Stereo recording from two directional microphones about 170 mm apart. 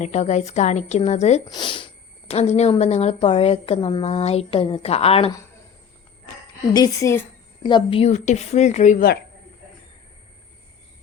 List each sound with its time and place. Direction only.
0.0 s a woman's voice: 45° left (ahead or behind)
1.5 s speech: 25° left (ahead or behind)
2.3 s a woman's voice: 40° left (ahead or behind)
6.7 s a woman's voice: 20° left (ahead or behind); by 9.0 s 45° left (ahead or behind)